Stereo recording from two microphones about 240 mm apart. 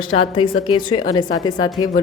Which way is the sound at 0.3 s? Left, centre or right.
Left.